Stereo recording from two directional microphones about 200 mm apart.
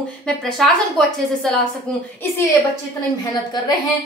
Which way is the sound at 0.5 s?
Centre (ahead or behind).